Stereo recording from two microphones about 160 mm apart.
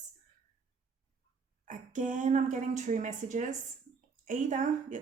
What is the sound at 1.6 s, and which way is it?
Speech, 55° right (ahead or behind).